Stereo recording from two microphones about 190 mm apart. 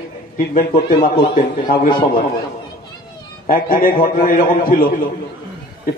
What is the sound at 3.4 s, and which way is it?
A man's voice, 50° left (ahead or behind).